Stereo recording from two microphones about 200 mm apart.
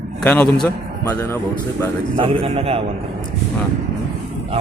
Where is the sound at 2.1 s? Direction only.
30° right (ahead or behind).